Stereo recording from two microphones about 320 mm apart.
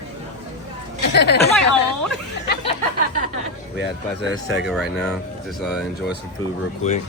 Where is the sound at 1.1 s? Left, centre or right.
Left.